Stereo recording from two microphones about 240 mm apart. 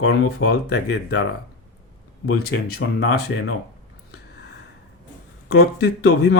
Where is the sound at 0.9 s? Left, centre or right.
Left.